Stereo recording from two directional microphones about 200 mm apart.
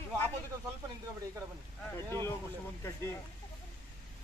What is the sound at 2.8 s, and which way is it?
Speech, 15° left (ahead or behind).